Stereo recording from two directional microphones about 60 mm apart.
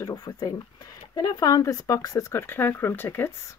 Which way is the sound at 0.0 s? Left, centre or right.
Left.